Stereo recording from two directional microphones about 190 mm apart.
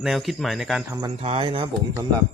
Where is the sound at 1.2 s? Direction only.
30° right (ahead or behind).